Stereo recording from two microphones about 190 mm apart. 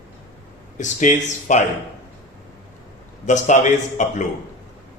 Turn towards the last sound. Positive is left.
turn(degrees=40)  # may be behind; listen again after turning